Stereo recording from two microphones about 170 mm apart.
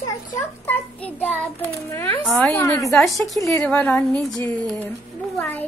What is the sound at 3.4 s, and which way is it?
Speech, 15° left (ahead or behind).